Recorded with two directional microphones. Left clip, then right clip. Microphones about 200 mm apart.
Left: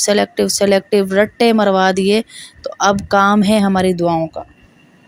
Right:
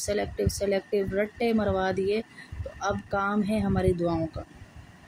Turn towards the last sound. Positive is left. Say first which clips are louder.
# left 11 dB
turn(degrees=40)  # may be behind; listen again after turning